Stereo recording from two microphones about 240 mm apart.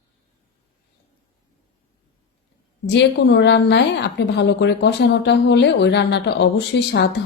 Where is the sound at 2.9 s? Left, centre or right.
Left.